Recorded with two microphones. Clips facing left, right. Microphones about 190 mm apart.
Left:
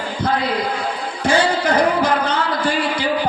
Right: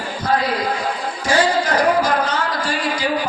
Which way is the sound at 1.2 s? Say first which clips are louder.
Left 1 dB; 60° left (ahead or behind).